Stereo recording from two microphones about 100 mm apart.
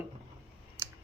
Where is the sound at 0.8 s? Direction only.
25° right (ahead or behind).